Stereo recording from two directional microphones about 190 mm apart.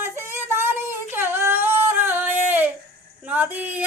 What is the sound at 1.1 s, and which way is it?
Singing, 10° right (ahead or behind).